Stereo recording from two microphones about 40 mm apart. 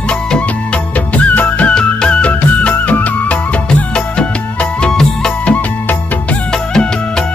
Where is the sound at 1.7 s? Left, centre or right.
Left.